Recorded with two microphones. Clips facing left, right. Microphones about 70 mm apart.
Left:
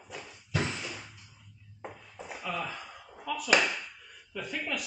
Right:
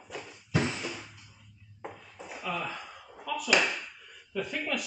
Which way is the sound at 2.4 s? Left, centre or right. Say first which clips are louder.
Right 1 dB; centre.